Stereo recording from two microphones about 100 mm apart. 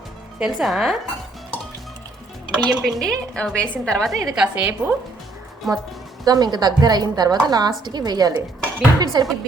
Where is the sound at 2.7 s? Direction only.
Centre (ahead or behind).